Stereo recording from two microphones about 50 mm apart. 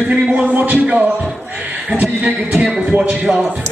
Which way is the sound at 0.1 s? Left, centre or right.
Right.